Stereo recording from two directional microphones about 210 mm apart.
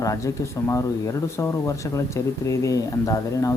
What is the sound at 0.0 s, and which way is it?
Speech, 15° left (ahead or behind).